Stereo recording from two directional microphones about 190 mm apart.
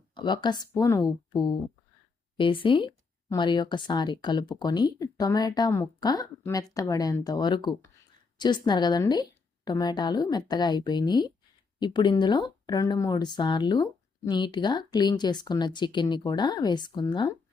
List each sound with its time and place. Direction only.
0.1 s speech: 25° left (ahead or behind)